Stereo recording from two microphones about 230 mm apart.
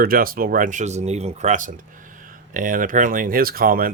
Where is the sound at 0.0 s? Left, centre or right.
Right.